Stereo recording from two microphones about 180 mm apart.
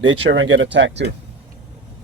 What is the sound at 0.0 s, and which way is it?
Speech, 90° right.